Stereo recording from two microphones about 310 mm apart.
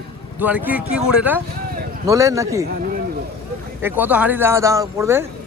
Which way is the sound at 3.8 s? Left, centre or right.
Centre.